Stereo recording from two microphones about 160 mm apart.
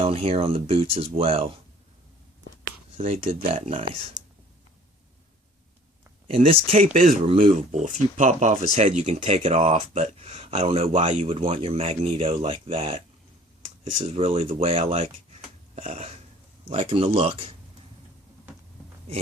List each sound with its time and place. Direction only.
0.0 s speech: 35° right (ahead or behind)
3.0 s speech: 40° right (ahead or behind)
6.2 s speech: 35° right (ahead or behind)
6.8 s speech: 55° right (ahead or behind); by 13.0 s 35° right (ahead or behind)
14.1 s speech: 40° right (ahead or behind)
16.6 s speech: 35° right (ahead or behind)